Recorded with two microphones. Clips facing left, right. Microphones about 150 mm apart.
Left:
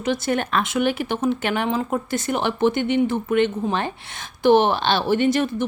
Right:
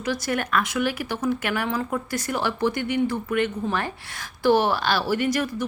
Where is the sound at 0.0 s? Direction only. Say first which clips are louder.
Left 4 dB; 25° left (ahead or behind).